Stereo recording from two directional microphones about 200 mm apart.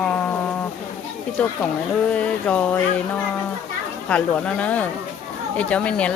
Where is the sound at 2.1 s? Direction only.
5° left (ahead or behind).